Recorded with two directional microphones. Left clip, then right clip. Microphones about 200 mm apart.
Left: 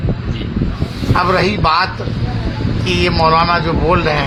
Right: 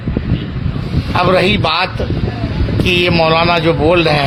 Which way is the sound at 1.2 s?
50° right (ahead or behind).